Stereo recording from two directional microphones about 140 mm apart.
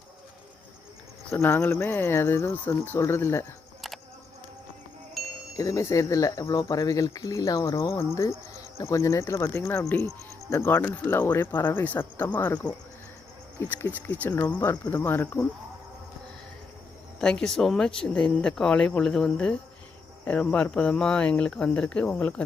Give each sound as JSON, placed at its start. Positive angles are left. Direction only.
{"t": 1.3, "sound": "speech", "side_deg": 20}
{"t": 3.8, "sound": "a sound", "side_deg": 0}
{"t": 5.2, "sound": "wind chime", "side_deg": 0}
{"t": 5.5, "sound": "speech", "side_deg": 25}
{"t": 13.6, "sound": "speech", "side_deg": 15}
{"t": 17.2, "sound": "speech", "side_deg": 5}